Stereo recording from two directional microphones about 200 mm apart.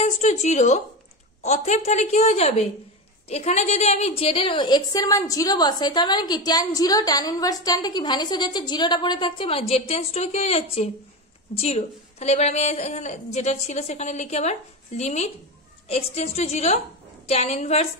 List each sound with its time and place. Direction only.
0.0 s a woman's voice: 35° left (ahead or behind)